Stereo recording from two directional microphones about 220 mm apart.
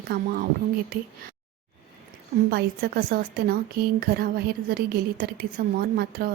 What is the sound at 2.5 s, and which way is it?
A woman's voice, 40° right (ahead or behind).